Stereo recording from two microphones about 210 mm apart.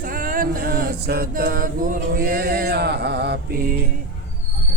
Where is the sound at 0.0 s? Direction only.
40° right (ahead or behind).